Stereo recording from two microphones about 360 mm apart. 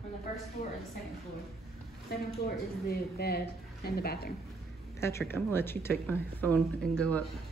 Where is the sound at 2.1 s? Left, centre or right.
Left.